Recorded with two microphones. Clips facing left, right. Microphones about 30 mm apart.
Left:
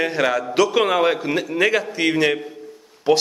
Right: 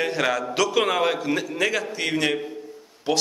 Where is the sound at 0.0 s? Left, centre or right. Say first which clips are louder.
Left 3 dB; centre.